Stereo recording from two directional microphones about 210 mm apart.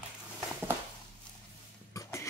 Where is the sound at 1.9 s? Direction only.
15° left (ahead or behind).